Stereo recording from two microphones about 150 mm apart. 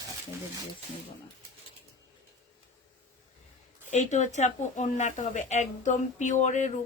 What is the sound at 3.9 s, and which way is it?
Speech, 50° left (ahead or behind).